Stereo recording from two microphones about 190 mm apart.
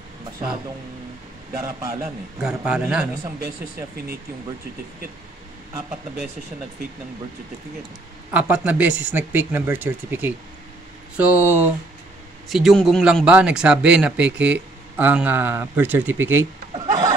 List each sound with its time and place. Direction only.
1.5 s speech: 15° right (ahead or behind)
2.4 s a man's voice: 5° right (ahead or behind)
5.8 s speech: 10° right (ahead or behind)
8.3 s speech: 5° right (ahead or behind)
16.7 s a sound: 20° right (ahead or behind)